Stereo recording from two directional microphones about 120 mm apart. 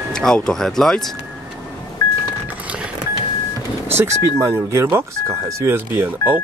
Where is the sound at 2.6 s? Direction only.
10° right (ahead or behind).